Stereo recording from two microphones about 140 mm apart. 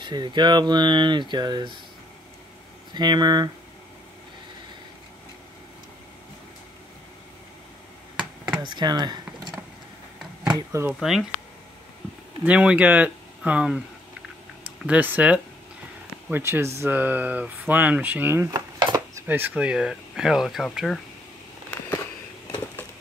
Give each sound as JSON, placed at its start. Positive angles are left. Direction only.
{"t": 0.0, "sound": "speech", "side_deg": -30}
{"t": 2.9, "sound": "speech", "side_deg": -30}
{"t": 8.6, "sound": "speech", "side_deg": -30}
{"t": 10.7, "sound": "speech", "side_deg": -20}
{"t": 11.0, "sound": "speech", "side_deg": 0}
{"t": 12.4, "sound": "speech", "side_deg": -10}
{"t": 14.8, "sound": "speech", "side_deg": -10}
{"t": 18.5, "sound": "a sound", "side_deg": -30}
{"t": 19.2, "sound": "speech", "side_deg": -15}